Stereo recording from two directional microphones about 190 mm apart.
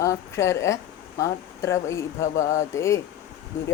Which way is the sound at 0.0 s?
15° left (ahead or behind).